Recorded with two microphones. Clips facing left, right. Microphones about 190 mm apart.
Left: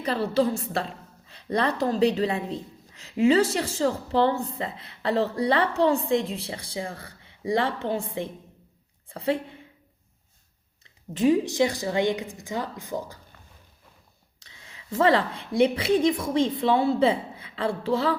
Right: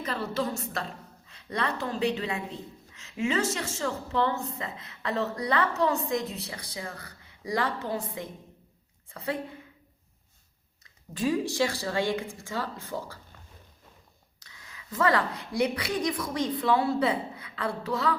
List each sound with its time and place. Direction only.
0.0 s a woman's voice: 35° left (ahead or behind)
11.1 s a woman's voice: 20° left (ahead or behind)
14.3 s speech: 25° left (ahead or behind)